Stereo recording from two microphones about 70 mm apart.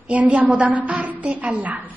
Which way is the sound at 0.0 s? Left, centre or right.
Centre.